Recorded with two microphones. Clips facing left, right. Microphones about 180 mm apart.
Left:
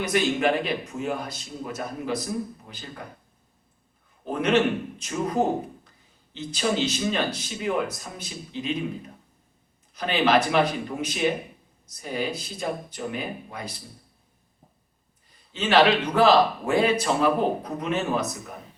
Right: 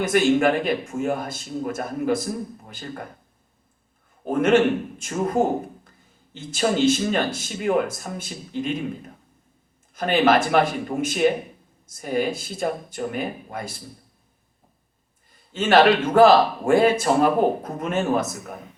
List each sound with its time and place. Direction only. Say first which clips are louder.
0.0 s a man's voice: right 5 dB; 50° right (ahead or behind)
4.3 s a man's voice: right 4 dB; 50° right (ahead or behind)
15.3 s a man's voice: right 4 dB; 50° right (ahead or behind)